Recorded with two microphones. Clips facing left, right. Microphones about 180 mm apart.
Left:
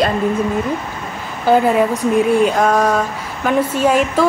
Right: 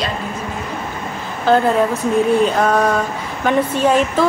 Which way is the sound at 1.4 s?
10° left (ahead or behind).